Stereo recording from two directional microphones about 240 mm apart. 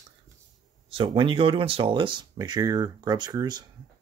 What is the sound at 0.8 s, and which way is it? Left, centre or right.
Speech, right.